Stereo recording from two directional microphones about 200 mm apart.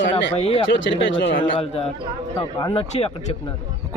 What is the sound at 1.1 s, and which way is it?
Speech, 65° left (ahead or behind).